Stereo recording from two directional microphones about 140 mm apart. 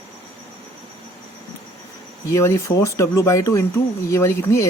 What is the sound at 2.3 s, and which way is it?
Speech, 20° left (ahead or behind).